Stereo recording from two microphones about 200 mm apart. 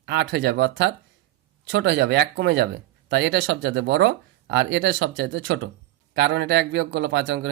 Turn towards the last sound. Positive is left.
turn(degrees=-65)  # may be behind; listen again after turning